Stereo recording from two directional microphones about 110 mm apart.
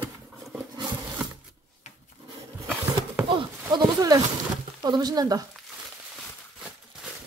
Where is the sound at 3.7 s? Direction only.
35° right (ahead or behind).